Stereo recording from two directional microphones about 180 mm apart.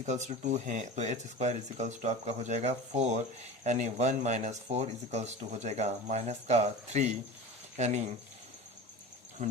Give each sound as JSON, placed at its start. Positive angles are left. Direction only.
{"t": 0.0, "sound": "speech", "side_deg": -40}